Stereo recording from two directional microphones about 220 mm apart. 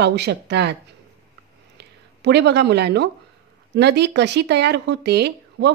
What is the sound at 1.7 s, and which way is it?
Speech, 50° right (ahead or behind).